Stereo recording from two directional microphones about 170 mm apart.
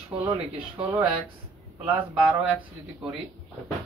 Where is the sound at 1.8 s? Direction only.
10° right (ahead or behind).